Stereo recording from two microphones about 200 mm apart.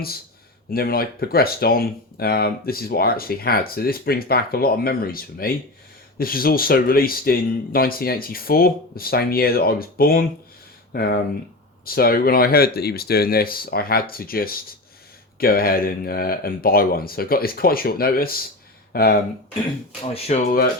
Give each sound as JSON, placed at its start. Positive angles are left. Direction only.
{"t": 0.7, "sound": "speech", "side_deg": 50}
{"t": 20.1, "sound": "speech", "side_deg": 30}